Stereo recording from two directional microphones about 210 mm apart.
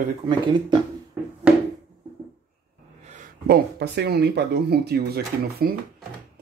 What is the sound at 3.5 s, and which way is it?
Speech, 50° right (ahead or behind).